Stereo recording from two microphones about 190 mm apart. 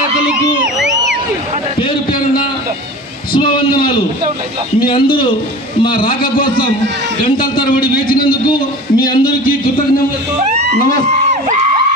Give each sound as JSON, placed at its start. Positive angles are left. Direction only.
{"t": 3.3, "sound": "a man's voice", "side_deg": 25}
{"t": 7.2, "sound": "a man's voice", "side_deg": 25}
{"t": 7.9, "sound": "a man's voice", "side_deg": 50}
{"t": 8.5, "sound": "a man's voice", "side_deg": 25}